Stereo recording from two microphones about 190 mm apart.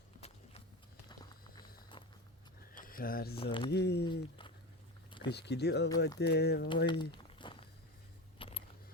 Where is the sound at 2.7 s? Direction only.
50° left (ahead or behind).